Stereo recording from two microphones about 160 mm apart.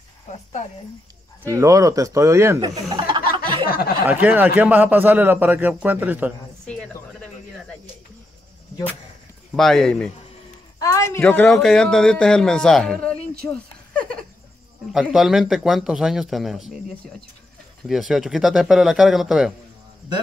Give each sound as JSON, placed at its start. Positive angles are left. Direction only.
{"t": 0.3, "sound": "speech", "side_deg": 45}
{"t": 1.4, "sound": "speech", "side_deg": -20}
{"t": 3.6, "sound": "speech", "side_deg": 65}
{"t": 4.1, "sound": "a man's voice", "side_deg": -10}
{"t": 9.6, "sound": "a man's voice", "side_deg": 0}
{"t": 10.8, "sound": "a man's voice", "side_deg": 20}
{"t": 14.9, "sound": "a man's voice", "side_deg": 0}
{"t": 17.8, "sound": "a man's voice", "side_deg": 0}